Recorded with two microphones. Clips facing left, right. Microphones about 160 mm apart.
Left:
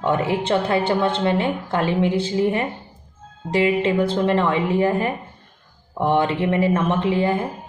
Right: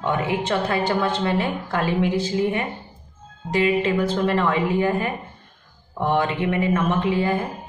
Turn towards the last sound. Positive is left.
turn(degrees=25)  # may be behind; listen again after turning